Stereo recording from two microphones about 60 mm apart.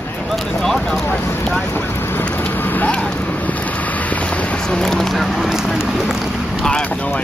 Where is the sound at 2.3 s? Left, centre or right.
Left.